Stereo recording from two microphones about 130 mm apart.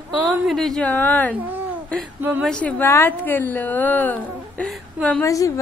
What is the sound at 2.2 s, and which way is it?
Speech, 15° right (ahead or behind).